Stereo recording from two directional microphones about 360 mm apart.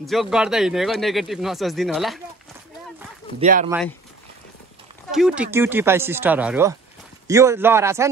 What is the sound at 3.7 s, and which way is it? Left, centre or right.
Speech, centre.